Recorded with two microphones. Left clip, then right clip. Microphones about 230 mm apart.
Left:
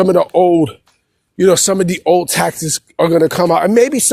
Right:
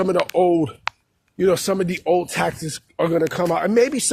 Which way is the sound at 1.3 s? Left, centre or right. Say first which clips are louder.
Left 7 dB; left.